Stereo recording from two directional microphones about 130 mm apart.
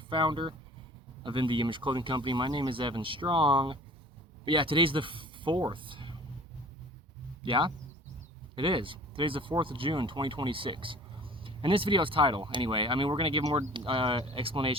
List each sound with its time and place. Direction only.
0.1 s speech: 40° right (ahead or behind)
7.4 s speech: 40° right (ahead or behind)